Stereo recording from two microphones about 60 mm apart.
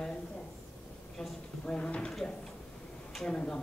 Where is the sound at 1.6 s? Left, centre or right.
Centre.